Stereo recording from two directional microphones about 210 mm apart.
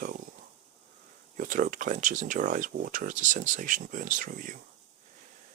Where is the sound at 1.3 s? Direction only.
40° right (ahead or behind).